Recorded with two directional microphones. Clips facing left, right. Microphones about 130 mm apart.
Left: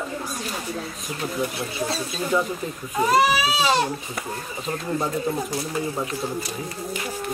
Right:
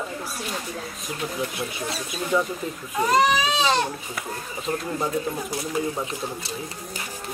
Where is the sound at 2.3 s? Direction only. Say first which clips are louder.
Even; centre (ahead or behind).